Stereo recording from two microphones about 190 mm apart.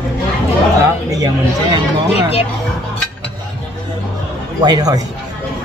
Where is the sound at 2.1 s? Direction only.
30° left (ahead or behind).